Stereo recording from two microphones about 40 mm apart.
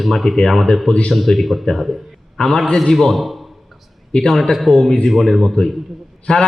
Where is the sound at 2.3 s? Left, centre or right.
Centre.